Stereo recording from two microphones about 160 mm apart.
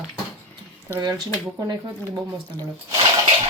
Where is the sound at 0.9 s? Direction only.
25° right (ahead or behind).